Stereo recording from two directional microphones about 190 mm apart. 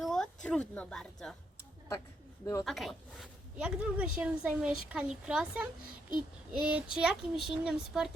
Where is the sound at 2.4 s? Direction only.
15° left (ahead or behind).